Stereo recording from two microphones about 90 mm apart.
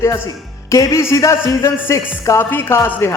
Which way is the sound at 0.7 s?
35° left (ahead or behind).